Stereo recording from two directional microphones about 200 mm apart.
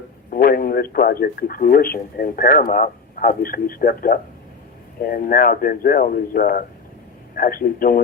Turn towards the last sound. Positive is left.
turn(degrees=45)  # may be behind; listen again after turning